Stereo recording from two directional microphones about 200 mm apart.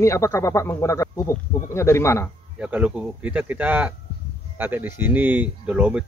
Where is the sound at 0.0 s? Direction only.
15° left (ahead or behind).